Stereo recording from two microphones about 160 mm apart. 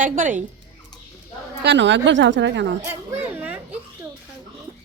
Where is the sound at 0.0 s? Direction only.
55° right (ahead or behind).